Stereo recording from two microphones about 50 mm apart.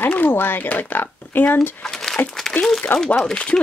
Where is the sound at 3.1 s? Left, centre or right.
Centre.